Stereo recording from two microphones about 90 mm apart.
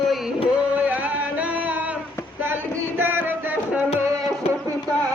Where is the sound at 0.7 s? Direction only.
15° right (ahead or behind).